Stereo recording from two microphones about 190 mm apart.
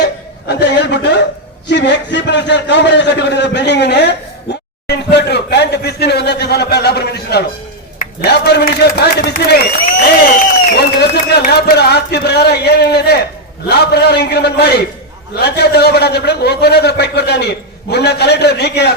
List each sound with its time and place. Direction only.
0.0 s chuckle: 65° left (ahead or behind)
1.6 s a man's voice: 65° left (ahead or behind)
4.9 s a sound: 60° left (ahead or behind)
9.0 s a man's voice: 60° left (ahead or behind)
10.8 s a sound: 60° left (ahead or behind)
13.7 s a man's voice: 60° left (ahead or behind)